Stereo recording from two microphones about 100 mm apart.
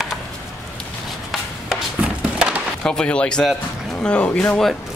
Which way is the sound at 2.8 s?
10° left (ahead or behind).